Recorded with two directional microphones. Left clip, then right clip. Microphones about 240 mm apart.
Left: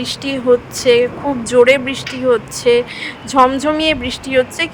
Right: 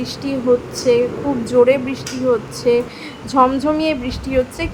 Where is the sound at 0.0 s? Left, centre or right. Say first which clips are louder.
Left 3 dB; left.